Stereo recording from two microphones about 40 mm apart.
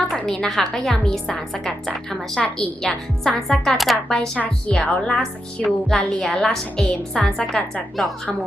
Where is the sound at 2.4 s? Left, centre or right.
Centre.